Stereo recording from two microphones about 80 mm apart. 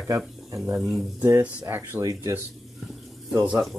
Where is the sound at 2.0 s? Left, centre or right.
Right.